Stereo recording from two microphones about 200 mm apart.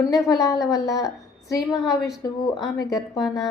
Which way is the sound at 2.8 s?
15° left (ahead or behind).